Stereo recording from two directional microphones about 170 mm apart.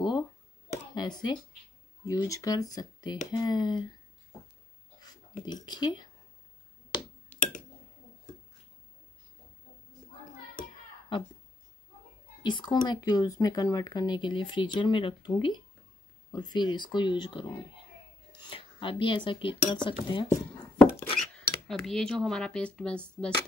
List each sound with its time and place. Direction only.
0.9 s speech: 25° left (ahead or behind)
5.4 s speech: 25° left (ahead or behind)
7.3 s a sound: 10° left (ahead or behind)
12.4 s speech: 25° left (ahead or behind)
20.2 s chopping: 25° left (ahead or behind)
21.0 s speech: 5° left (ahead or behind)